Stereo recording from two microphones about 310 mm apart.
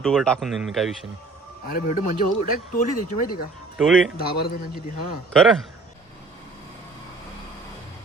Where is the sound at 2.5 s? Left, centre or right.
Left.